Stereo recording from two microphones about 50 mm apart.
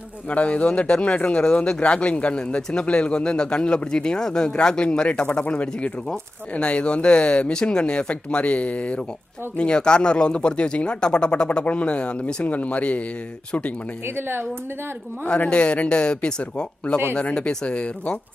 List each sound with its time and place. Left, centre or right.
0.3 s speech: left
12.4 s speech: left
14.0 s speech: right
15.2 s speech: left